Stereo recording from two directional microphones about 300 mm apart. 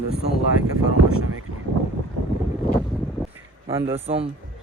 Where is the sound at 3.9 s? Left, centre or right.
Centre.